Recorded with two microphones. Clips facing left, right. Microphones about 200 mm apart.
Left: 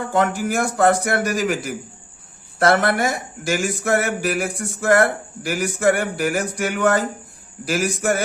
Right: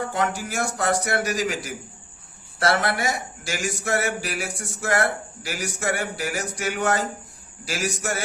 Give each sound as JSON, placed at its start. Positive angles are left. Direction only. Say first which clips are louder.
{"t": 0.1, "sound": "a man's voice", "louder": "left 6 dB", "side_deg": 55}